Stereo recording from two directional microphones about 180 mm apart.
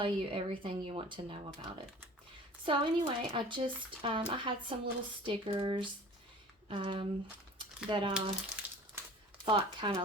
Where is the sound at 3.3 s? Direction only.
25° right (ahead or behind).